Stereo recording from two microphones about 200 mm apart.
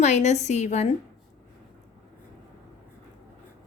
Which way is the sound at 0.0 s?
35° left (ahead or behind).